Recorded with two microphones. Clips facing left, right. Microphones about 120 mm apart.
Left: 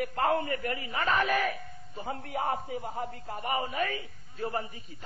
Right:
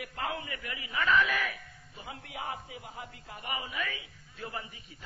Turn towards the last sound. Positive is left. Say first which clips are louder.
# left 7 dB
turn(degrees=40)  # may be behind; listen again after turning